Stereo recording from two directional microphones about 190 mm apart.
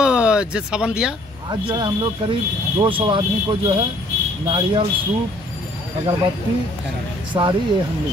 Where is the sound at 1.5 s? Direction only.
20° right (ahead or behind).